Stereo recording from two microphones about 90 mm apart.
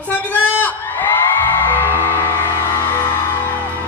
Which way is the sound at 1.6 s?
20° left (ahead or behind).